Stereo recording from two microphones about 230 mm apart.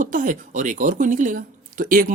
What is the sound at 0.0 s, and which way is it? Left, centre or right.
Speech, right.